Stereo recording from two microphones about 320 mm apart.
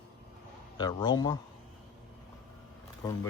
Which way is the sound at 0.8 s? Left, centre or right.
Centre.